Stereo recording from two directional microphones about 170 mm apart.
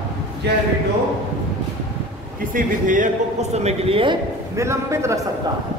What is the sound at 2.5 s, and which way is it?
Speech, 50° right (ahead or behind).